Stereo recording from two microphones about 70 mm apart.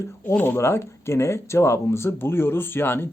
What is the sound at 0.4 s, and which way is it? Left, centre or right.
Speech, left.